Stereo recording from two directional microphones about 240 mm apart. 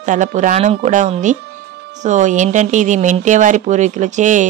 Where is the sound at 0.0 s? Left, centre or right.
Right.